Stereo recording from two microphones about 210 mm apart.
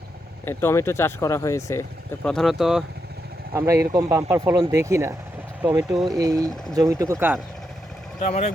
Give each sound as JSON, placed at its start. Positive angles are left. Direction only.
{"t": 0.4, "sound": "speech", "side_deg": 15}
{"t": 2.2, "sound": "speech", "side_deg": 0}
{"t": 3.5, "sound": "speech", "side_deg": -15}
{"t": 8.2, "sound": "speech", "side_deg": 35}